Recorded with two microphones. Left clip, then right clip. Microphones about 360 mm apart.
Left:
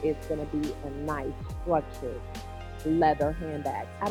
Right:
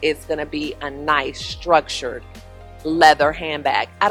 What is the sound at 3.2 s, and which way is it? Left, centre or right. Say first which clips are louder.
Speech: right 11 dB; centre.